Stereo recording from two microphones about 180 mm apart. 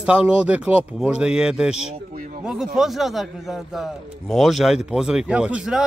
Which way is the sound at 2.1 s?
45° right (ahead or behind).